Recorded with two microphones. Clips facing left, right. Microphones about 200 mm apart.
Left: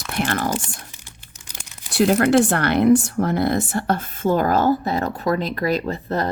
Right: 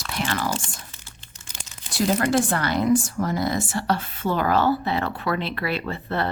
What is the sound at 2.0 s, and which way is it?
A woman's voice, 65° left (ahead or behind).